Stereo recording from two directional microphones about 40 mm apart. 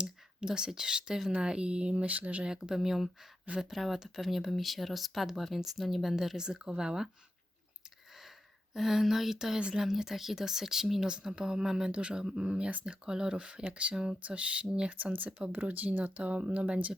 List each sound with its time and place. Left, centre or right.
0.0 s speech: centre; by 2.4 s right
2.6 s speech: centre
6.3 s speech: centre
8.7 s speech: centre
11.9 s speech: right
13.9 s speech: right
14.3 s speech: right
14.9 s speech: right